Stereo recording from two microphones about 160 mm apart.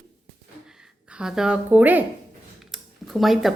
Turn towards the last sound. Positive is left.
turn(degrees=0)  # may be behind; listen again after turning